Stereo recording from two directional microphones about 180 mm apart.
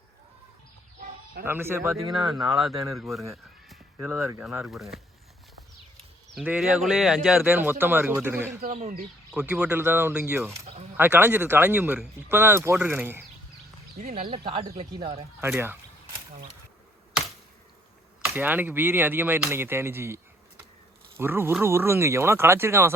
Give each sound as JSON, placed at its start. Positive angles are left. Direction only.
{"t": 1.5, "sound": "speech", "side_deg": -10}
{"t": 2.5, "sound": "speech", "side_deg": 0}
{"t": 3.9, "sound": "speech", "side_deg": -15}
{"t": 4.4, "sound": "speech", "side_deg": 0}
{"t": 6.3, "sound": "speech", "side_deg": -5}
{"t": 8.6, "sound": "speech", "side_deg": -45}
{"t": 9.3, "sound": "speech", "side_deg": -5}
{"t": 14.0, "sound": "speech", "side_deg": -35}
{"t": 15.4, "sound": "speech", "side_deg": -15}
{"t": 18.3, "sound": "speech", "side_deg": -10}
{"t": 21.2, "sound": "speech", "side_deg": -15}